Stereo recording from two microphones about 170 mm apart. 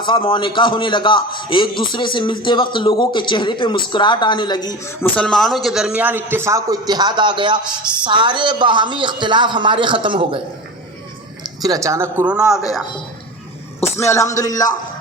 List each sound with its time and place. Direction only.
0.0 s a man's voice: 30° left (ahead or behind)
5.1 s a man's voice: 5° left (ahead or behind); by 10.4 s 30° right (ahead or behind)
11.4 s speech: 20° right (ahead or behind); by 12.6 s 5° right (ahead or behind)
13.9 s a man's voice: 15° left (ahead or behind)